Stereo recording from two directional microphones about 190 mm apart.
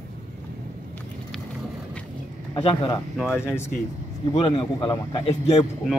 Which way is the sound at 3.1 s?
Centre (ahead or behind).